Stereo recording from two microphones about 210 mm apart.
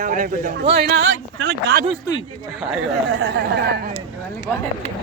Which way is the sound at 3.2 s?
50° right (ahead or behind).